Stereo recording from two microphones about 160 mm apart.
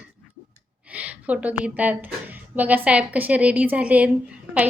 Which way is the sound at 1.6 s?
10° right (ahead or behind).